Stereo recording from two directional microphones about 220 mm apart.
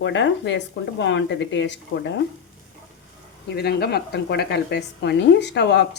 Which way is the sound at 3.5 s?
45° left (ahead or behind).